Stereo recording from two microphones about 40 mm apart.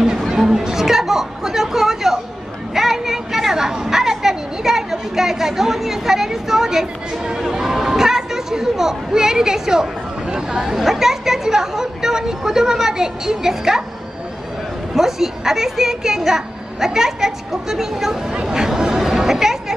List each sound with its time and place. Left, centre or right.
0.7 s music: centre
2.7 s a sound: centre
10.3 s speech: centre
15.0 s speech: centre
19.0 s music: centre